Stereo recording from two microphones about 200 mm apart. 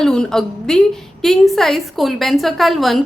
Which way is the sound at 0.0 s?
5° left (ahead or behind).